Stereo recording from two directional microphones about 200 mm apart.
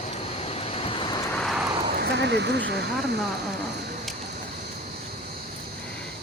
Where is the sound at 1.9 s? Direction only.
55° right (ahead or behind).